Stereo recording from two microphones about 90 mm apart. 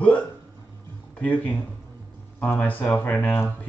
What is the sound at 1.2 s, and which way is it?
Speech, 20° left (ahead or behind).